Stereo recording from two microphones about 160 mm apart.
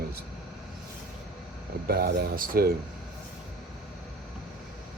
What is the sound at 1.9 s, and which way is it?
Speech, 75° right (ahead or behind).